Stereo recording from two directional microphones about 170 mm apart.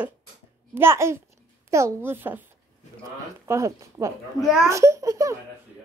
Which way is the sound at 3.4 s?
15° right (ahead or behind).